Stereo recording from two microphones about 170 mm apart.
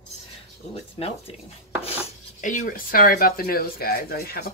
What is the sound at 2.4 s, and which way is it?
Speech, 50° left (ahead or behind).